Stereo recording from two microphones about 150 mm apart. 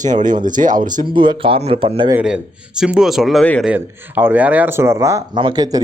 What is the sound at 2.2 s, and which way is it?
Speech, 5° right (ahead or behind).